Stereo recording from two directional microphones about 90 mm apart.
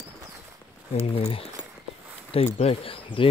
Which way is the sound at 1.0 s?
90° left.